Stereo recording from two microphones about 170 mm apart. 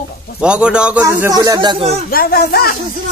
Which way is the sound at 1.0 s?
20° right (ahead or behind).